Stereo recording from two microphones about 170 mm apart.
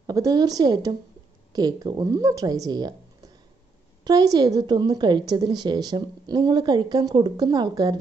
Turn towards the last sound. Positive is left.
turn(degrees=-25)  # may be behind; listen again after turning